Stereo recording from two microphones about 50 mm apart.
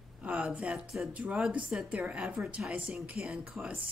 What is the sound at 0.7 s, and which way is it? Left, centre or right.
Speech, centre.